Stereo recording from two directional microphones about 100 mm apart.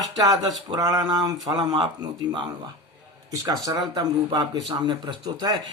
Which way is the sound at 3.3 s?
40° right (ahead or behind).